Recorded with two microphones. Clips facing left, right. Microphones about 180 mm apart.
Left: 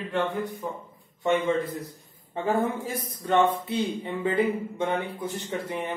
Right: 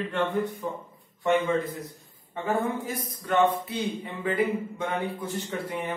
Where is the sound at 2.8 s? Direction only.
25° left (ahead or behind).